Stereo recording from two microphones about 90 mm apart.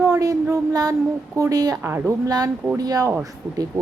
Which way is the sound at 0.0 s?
40° right (ahead or behind).